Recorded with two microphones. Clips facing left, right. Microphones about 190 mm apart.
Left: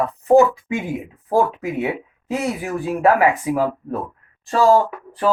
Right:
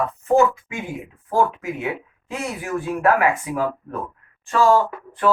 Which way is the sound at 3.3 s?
35° left (ahead or behind).